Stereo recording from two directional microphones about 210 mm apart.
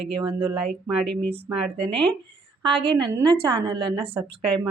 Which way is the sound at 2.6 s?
25° right (ahead or behind).